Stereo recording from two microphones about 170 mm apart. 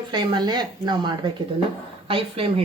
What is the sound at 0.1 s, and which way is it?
Speech, 25° right (ahead or behind).